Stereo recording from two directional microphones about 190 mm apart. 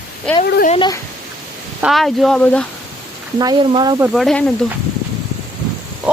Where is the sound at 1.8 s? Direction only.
Centre (ahead or behind).